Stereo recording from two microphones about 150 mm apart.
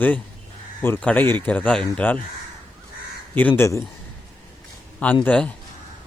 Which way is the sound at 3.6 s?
20° left (ahead or behind).